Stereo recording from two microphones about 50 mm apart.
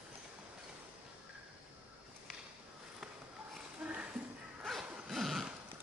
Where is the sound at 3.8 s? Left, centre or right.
Right.